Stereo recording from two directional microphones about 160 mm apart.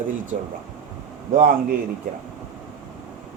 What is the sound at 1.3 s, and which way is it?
Speech, 60° right (ahead or behind).